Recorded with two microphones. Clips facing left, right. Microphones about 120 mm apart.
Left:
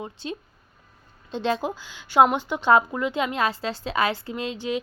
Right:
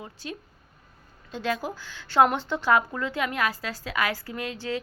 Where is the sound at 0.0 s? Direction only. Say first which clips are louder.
Left 5 dB; 25° left (ahead or behind).